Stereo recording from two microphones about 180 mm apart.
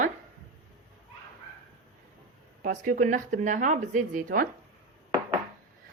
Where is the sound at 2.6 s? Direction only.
50° right (ahead or behind).